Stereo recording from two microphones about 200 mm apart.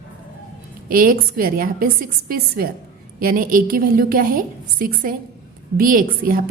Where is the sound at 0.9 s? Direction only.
45° right (ahead or behind).